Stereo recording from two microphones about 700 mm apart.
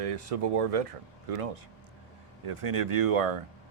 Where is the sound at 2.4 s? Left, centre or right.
Right.